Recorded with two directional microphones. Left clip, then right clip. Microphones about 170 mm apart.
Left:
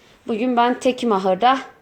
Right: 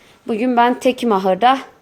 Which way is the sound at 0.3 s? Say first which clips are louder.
Right 3 dB; 15° right (ahead or behind).